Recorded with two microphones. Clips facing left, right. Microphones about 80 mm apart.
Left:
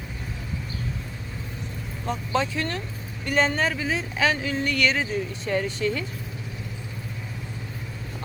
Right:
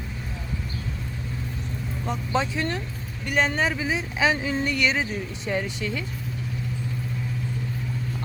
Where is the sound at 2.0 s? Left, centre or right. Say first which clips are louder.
Left 1 dB; centre.